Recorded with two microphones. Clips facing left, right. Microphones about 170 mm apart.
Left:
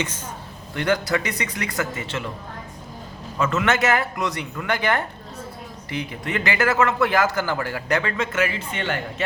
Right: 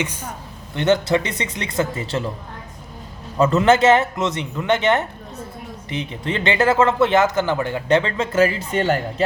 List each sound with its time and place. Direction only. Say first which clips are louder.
0.7 s speech: right 5 dB; 25° right (ahead or behind)
3.3 s speech: right 7 dB; 35° right (ahead or behind)